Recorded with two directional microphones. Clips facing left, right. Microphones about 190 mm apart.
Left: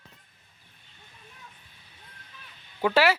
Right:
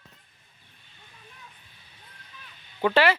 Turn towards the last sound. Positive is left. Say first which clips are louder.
# right 1 dB
turn(degrees=10)  # may be behind; listen again after turning